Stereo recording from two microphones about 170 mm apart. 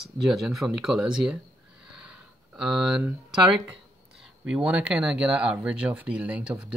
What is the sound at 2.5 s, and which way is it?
Speech, 5° right (ahead or behind).